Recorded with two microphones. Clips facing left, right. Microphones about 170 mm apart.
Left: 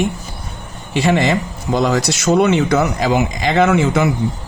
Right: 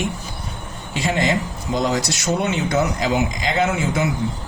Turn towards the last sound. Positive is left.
turn(degrees=70)  # may be behind; listen again after turning